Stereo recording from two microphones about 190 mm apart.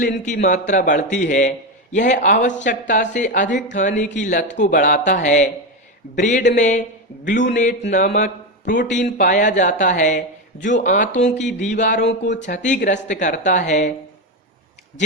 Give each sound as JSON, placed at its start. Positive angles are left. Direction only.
{"t": 0.0, "sound": "speech", "side_deg": 45}